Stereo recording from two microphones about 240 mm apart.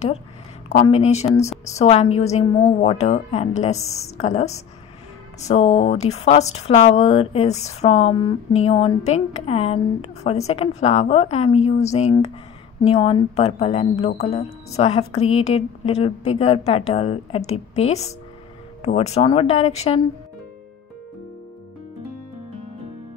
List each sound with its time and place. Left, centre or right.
0.7 s speech: left